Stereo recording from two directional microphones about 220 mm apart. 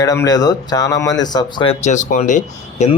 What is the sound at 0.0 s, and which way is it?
Speech, 15° left (ahead or behind).